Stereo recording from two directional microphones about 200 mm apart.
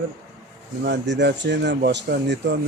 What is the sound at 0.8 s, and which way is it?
Speech, 60° right (ahead or behind).